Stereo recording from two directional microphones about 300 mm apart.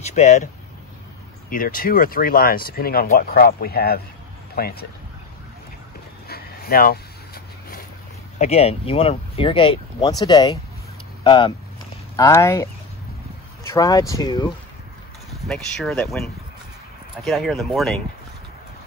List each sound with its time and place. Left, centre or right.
0.0 s speech: left
1.5 s speech: left
6.2 s vehicle: left
8.4 s speech: left
13.7 s speech: centre
15.4 s speech: centre